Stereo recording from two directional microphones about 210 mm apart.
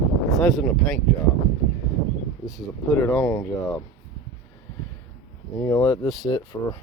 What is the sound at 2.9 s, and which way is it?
Speech, 10° left (ahead or behind).